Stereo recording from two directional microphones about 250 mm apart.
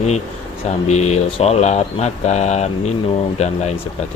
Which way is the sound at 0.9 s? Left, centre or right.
Left.